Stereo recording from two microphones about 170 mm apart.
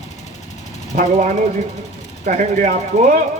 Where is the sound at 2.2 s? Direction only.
50° right (ahead or behind).